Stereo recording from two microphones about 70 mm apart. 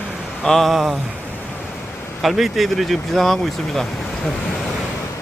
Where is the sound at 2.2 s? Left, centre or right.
Centre.